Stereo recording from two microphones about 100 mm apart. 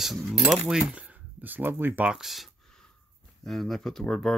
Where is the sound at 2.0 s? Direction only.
5° right (ahead or behind).